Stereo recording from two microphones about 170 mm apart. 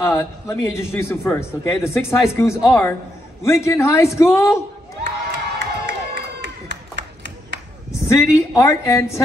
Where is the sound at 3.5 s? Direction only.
15° left (ahead or behind).